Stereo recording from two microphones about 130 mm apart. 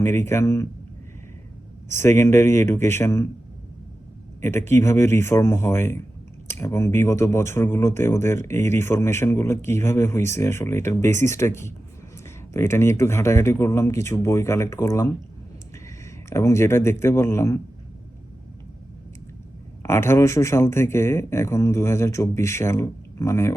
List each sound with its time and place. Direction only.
0.0 s speech: 20° left (ahead or behind)
1.9 s speech: 20° left (ahead or behind)
4.4 s speech: 20° left (ahead or behind)
16.3 s speech: 20° left (ahead or behind)
19.8 s speech: 20° left (ahead or behind)